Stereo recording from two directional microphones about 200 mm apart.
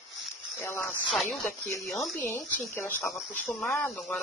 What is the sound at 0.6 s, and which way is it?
Speech, 10° left (ahead or behind).